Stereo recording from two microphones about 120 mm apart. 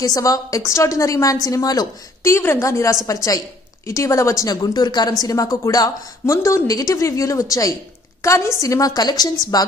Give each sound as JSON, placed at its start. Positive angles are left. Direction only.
{"t": 0.0, "sound": "a woman's voice", "side_deg": 30}